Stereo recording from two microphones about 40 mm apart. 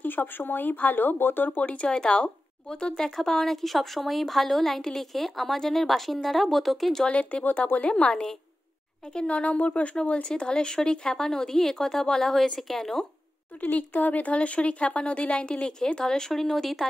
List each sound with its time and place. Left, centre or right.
0.0 s speech: left
1.6 s speech: left
3.0 s speech: centre
7.1 s speech: left
8.1 s speech: centre
9.3 s speech: left
10.2 s speech: left
13.6 s speech: left; by 16.8 s centre